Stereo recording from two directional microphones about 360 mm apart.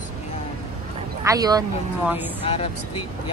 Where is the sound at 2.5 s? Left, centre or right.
Centre.